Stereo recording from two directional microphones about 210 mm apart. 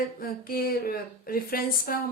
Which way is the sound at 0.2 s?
45° left (ahead or behind).